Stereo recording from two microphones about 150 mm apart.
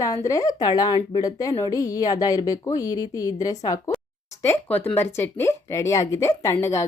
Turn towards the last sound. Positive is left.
turn(degrees=20)  # may be behind; listen again after turning